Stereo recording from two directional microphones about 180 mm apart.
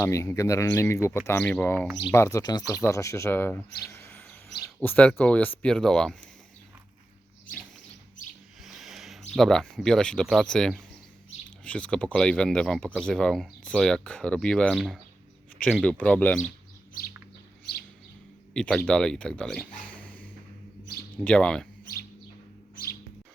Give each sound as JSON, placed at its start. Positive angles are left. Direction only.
{"t": 0.0, "sound": "speech", "side_deg": 15}
{"t": 8.6, "sound": "a sound", "side_deg": 0}
{"t": 9.3, "sound": "speech", "side_deg": 5}
{"t": 18.5, "sound": "speech", "side_deg": 5}
{"t": 21.2, "sound": "speech", "side_deg": 5}
{"t": 22.7, "sound": "bird", "side_deg": 55}